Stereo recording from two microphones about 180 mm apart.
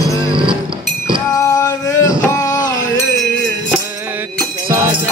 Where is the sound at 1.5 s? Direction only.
20° left (ahead or behind).